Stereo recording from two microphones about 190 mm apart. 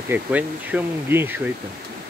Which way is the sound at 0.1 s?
10° right (ahead or behind).